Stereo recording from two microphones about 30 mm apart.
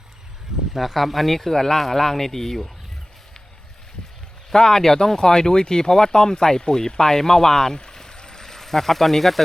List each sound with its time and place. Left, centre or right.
0.8 s speech: centre
4.5 s speech: centre